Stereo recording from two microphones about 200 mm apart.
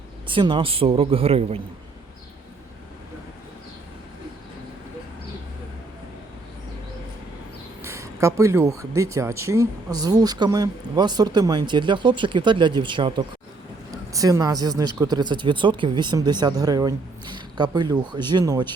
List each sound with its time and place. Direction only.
0.3 s speech: 25° right (ahead or behind)
7.8 s a sound: 15° right (ahead or behind)
9.0 s speech: 15° right (ahead or behind)